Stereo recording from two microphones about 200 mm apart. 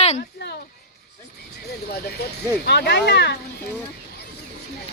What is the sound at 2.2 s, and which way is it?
Speech, 55° left (ahead or behind).